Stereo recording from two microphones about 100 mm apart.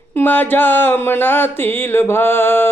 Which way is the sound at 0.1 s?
20° left (ahead or behind).